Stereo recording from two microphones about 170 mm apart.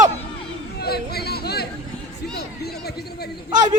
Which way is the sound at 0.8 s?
70° left (ahead or behind).